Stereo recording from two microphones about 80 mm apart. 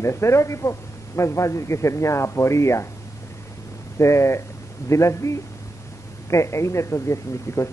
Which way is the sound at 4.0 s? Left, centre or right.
Left.